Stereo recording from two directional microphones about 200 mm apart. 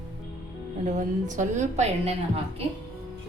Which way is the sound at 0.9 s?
40° right (ahead or behind).